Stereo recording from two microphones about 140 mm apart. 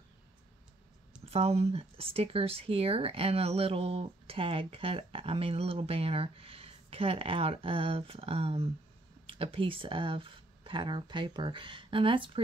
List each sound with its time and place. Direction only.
1.3 s speech: 50° right (ahead or behind)